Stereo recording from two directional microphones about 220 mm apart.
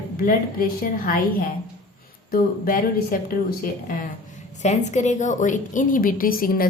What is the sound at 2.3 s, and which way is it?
A woman's voice, 40° left (ahead or behind).